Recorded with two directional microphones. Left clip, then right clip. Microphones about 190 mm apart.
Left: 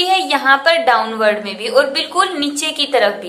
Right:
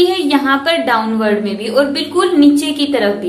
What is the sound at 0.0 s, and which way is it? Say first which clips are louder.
A woman's voice: right 1 dB; 30° left (ahead or behind).